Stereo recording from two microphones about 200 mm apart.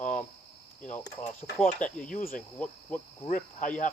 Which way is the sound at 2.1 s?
40° left (ahead or behind).